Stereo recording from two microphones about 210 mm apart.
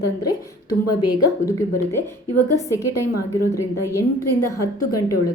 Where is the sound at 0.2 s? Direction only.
15° left (ahead or behind).